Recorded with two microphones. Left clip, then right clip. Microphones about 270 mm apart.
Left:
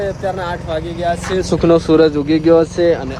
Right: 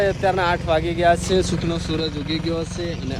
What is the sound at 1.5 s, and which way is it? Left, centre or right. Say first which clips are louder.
Speech: left 14 dB; centre.